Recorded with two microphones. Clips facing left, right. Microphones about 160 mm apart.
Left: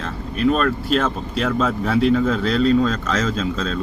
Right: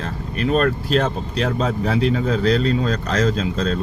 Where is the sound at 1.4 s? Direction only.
40° right (ahead or behind).